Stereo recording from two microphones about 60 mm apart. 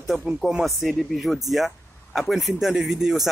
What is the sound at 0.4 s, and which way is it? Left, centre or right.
Speech, centre.